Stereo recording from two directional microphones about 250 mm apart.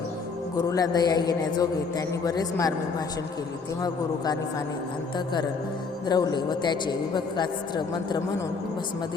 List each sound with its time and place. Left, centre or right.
0.5 s a man's voice: centre
5.1 s a man's voice: centre